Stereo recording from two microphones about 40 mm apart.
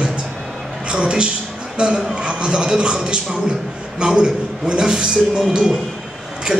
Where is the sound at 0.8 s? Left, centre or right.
Right.